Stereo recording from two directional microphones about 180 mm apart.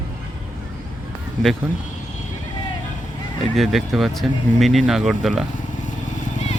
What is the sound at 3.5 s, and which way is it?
Speech, centre (ahead or behind).